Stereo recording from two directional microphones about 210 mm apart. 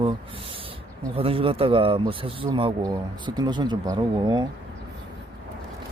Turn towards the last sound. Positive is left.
turn(degrees=-20)  # may be behind; listen again after turning